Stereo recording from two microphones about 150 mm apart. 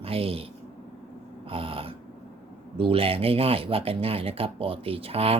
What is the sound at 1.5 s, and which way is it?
Speech, 35° right (ahead or behind).